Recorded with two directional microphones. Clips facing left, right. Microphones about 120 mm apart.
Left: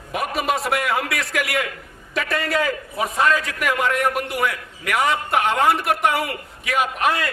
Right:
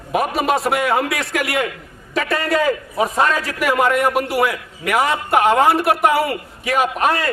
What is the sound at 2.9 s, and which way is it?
Speech, 35° right (ahead or behind).